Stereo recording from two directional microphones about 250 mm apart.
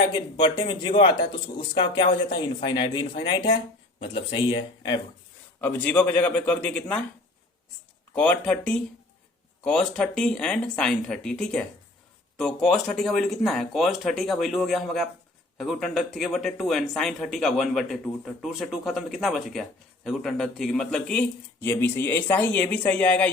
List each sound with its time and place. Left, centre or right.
0.1 s speech: centre
5.5 s a man's voice: centre
8.1 s a man's voice: centre